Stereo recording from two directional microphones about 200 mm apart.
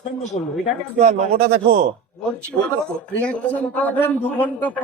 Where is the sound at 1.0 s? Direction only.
45° right (ahead or behind).